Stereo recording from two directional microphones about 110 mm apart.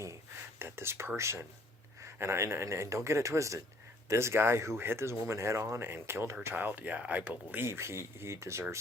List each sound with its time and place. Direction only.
0.6 s speech: 20° right (ahead or behind)